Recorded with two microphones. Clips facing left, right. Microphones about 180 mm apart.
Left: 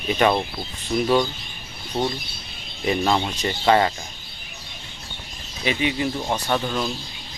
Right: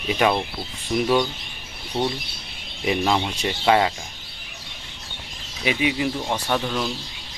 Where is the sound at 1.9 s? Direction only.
15° left (ahead or behind).